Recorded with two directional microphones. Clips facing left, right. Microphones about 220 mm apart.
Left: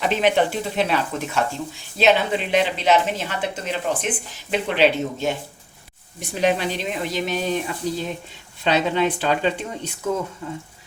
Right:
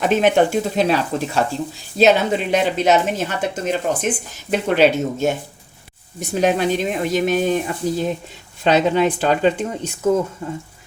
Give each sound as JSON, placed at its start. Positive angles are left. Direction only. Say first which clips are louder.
{"t": 0.0, "sound": "a woman's voice", "louder": "right 4 dB", "side_deg": -45}